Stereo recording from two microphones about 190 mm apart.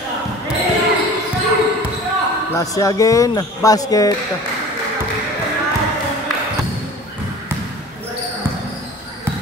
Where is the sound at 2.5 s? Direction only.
20° left (ahead or behind).